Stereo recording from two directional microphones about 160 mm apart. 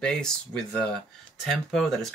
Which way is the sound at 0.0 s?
5° left (ahead or behind).